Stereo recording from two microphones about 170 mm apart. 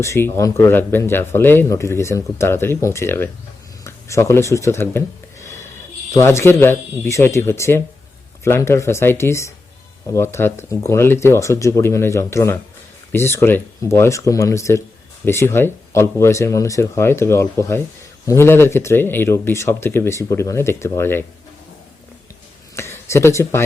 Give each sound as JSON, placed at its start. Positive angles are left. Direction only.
{"t": 0.0, "sound": "speech", "side_deg": 15}
{"t": 22.7, "sound": "speech", "side_deg": 15}